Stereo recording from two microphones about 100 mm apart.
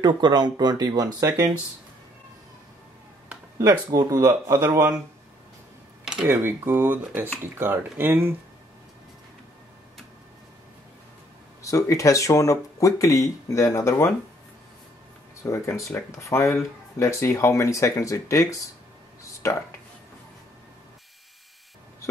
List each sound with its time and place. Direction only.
0.0 s speech: 45° right (ahead or behind)
3.5 s speech: 35° right (ahead or behind)
6.2 s speech: 20° right (ahead or behind)
11.6 s speech: 30° left (ahead or behind)
15.4 s speech: 30° left (ahead or behind)